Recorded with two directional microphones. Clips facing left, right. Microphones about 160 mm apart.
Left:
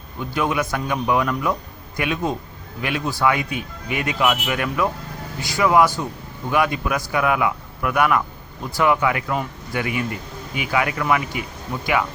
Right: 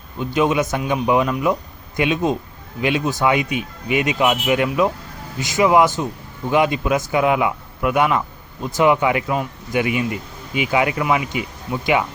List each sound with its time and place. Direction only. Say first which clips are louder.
0.2 s speech: right 4 dB; 20° right (ahead or behind)